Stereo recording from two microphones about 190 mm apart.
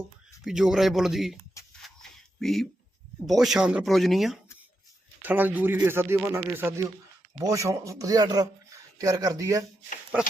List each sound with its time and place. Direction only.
0.4 s speech: 5° right (ahead or behind)
2.0 s a sound: centre (ahead or behind)
3.2 s speech: centre (ahead or behind)